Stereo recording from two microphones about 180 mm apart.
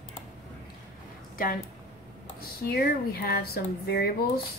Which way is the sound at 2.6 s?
60° left (ahead or behind).